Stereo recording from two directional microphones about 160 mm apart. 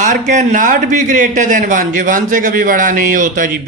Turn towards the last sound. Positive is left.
turn(degrees=-55)  # may be behind; listen again after turning